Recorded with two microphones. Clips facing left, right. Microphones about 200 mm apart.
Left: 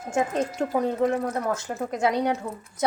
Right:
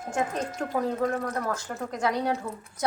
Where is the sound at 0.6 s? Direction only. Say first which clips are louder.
Left 3 dB; 20° left (ahead or behind).